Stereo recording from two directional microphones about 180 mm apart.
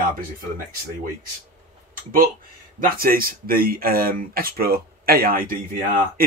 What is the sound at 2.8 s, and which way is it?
Speech, 55° right (ahead or behind).